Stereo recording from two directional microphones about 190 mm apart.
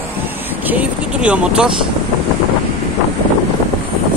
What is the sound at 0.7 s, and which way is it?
Speech, 5° right (ahead or behind).